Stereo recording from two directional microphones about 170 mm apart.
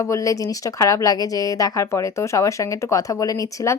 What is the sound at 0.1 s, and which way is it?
Speech, 20° left (ahead or behind).